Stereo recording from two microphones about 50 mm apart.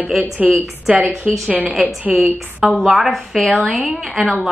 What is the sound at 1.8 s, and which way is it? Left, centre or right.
Speech, right.